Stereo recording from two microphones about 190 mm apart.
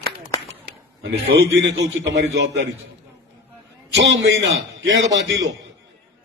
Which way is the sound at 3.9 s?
70° right (ahead or behind).